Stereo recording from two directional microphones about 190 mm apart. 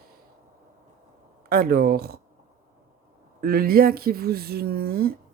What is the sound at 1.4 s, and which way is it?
Speech, 50° right (ahead or behind).